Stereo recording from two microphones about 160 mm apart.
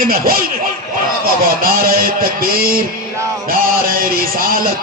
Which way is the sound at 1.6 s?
65° right (ahead or behind).